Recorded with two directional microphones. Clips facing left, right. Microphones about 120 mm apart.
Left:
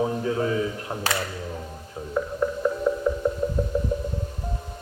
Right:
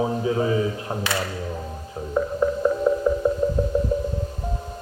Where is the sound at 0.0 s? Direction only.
15° right (ahead or behind).